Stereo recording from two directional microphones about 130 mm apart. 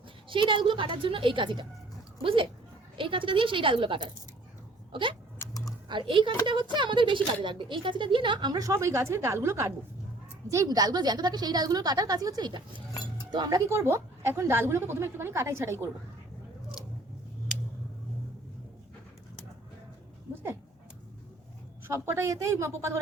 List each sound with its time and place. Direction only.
0.3 s a woman's voice: 40° right (ahead or behind)
5.4 s a sound: 25° left (ahead or behind)
5.9 s a woman's voice: 40° right (ahead or behind)
13.7 s a woman's voice: 20° right (ahead or behind)
21.8 s a woman's voice: 20° right (ahead or behind)